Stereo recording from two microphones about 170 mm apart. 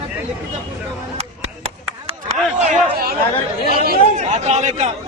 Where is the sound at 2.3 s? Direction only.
45° right (ahead or behind).